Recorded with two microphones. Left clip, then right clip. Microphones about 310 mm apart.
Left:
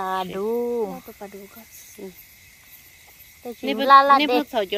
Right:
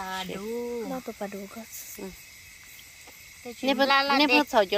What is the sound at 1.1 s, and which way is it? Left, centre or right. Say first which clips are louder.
Speech: right 3 dB; right.